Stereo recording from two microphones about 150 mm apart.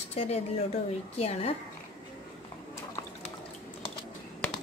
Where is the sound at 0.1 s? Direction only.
45° left (ahead or behind).